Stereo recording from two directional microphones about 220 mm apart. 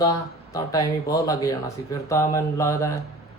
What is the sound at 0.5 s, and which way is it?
Speech, 15° left (ahead or behind).